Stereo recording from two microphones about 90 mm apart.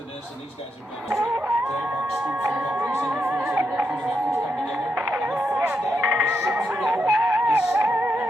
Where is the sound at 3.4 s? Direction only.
20° right (ahead or behind); by 7.3 s 5° right (ahead or behind).